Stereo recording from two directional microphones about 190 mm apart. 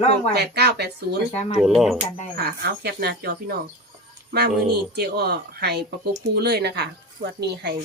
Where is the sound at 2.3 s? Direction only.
55° right (ahead or behind).